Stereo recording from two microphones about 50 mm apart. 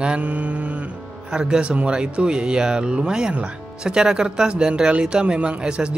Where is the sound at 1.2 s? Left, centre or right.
Centre.